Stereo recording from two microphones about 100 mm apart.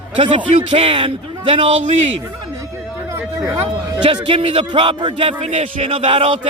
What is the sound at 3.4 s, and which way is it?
Speech, 35° right (ahead or behind).